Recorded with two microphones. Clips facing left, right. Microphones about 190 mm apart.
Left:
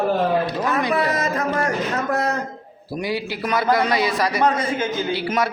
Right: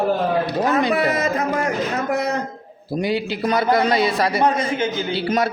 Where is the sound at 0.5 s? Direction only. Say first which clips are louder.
Right 2 dB; 25° right (ahead or behind).